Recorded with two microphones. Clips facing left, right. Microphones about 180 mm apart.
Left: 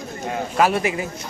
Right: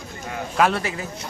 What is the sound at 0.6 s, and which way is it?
Speech, 10° left (ahead or behind).